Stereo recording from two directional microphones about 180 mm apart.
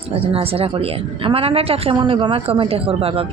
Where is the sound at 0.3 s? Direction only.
30° right (ahead or behind).